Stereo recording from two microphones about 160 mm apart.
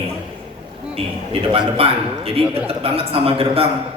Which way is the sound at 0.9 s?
35° right (ahead or behind).